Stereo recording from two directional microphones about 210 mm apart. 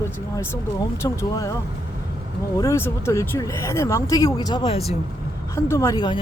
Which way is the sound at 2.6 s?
15° left (ahead or behind).